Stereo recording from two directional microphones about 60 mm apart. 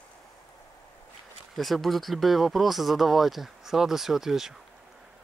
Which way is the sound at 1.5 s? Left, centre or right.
Centre.